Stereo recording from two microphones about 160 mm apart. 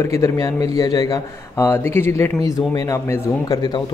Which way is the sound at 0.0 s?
20° left (ahead or behind).